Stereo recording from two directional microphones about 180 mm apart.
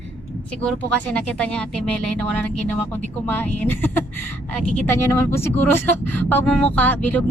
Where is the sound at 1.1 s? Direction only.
5° left (ahead or behind).